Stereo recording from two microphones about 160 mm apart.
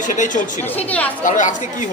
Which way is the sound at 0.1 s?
55° left (ahead or behind).